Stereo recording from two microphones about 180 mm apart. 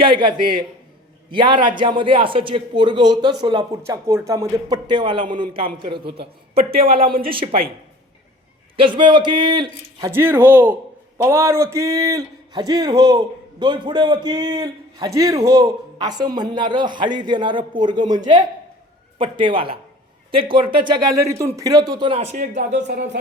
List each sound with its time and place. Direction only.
0.0 s speech: 25° right (ahead or behind)
8.7 s speech: 30° right (ahead or behind)
19.2 s speech: 25° right (ahead or behind)
22.7 s speech: 70° right (ahead or behind)